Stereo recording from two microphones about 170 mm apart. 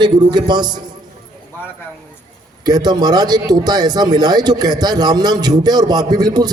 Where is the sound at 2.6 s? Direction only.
25° right (ahead or behind).